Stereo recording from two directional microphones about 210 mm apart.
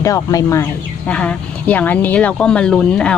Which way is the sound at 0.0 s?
15° left (ahead or behind).